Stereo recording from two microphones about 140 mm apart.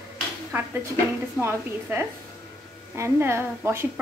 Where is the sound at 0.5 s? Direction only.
10° right (ahead or behind).